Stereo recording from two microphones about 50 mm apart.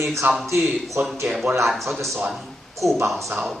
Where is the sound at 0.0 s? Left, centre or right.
Right.